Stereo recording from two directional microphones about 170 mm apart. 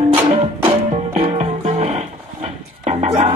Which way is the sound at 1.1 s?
40° right (ahead or behind).